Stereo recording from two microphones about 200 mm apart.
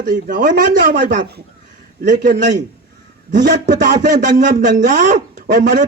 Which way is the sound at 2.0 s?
40° right (ahead or behind).